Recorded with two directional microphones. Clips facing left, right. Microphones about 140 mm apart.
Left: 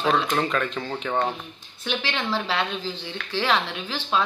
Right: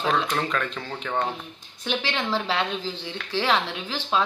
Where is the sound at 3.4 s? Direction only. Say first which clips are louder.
Even; 15° right (ahead or behind).